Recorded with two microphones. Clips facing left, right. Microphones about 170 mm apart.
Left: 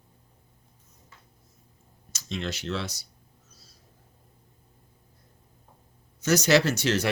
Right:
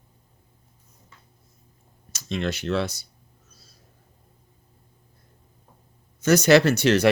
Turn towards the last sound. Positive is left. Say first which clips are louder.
# right 6 dB
turn(degrees=-65)  # may be behind; listen again after turning